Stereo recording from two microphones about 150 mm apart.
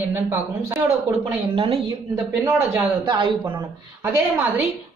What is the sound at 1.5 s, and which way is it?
Speech, 40° right (ahead or behind).